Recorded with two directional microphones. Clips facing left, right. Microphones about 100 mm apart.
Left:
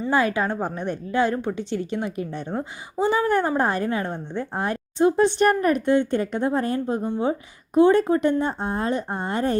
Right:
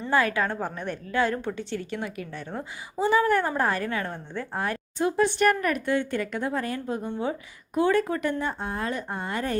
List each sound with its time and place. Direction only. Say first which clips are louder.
0.1 s a woman's voice: left 2 dB; 20° left (ahead or behind)